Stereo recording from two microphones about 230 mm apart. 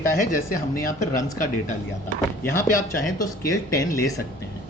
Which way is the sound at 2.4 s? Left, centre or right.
Centre.